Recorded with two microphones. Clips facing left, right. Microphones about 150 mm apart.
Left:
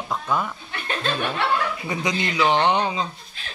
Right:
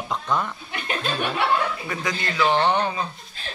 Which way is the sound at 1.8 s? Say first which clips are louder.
Left 3 dB; 20° left (ahead or behind).